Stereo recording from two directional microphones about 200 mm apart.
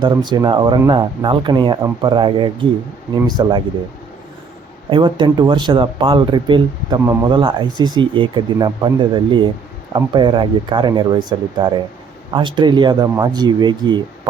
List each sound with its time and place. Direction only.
0.3 s speech: 20° right (ahead or behind)
4.9 s speech: 25° right (ahead or behind)